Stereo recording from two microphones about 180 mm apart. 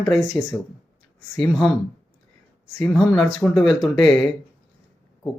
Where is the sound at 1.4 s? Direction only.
Centre (ahead or behind).